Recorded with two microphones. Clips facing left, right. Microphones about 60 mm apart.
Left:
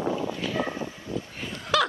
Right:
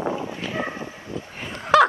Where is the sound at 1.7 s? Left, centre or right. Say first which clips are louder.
Right 9 dB; right.